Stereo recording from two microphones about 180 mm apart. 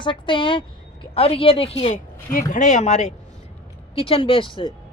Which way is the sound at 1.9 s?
45° left (ahead or behind).